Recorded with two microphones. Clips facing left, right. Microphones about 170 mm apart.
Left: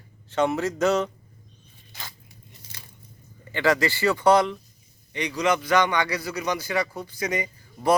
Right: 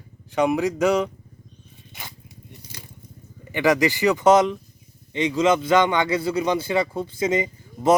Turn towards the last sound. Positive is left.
turn(degrees=-25)  # may be behind; listen again after turning